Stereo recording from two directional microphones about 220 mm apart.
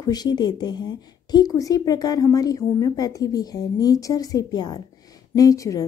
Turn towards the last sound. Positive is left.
turn(degrees=15)  # may be behind; listen again after turning